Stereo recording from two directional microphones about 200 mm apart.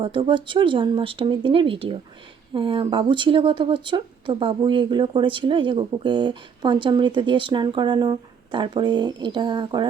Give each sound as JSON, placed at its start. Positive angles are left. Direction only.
{"t": 0.0, "sound": "speech", "side_deg": -25}